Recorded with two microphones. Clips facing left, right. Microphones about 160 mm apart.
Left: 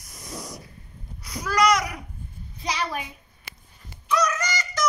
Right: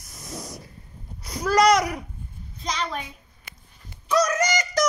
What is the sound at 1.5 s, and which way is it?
Babbling, 25° right (ahead or behind).